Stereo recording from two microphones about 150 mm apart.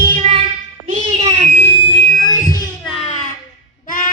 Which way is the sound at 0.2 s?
40° right (ahead or behind).